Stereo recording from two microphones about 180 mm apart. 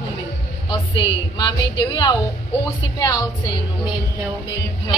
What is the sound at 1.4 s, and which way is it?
Speech, 25° left (ahead or behind).